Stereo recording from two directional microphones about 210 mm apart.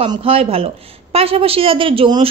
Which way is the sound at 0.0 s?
25° right (ahead or behind).